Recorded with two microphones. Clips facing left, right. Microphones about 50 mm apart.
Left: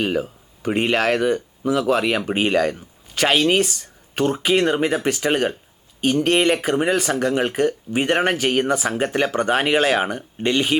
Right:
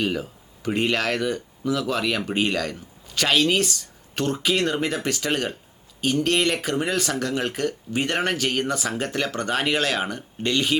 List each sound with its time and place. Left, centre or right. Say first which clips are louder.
0.0 s speech: left 4 dB; left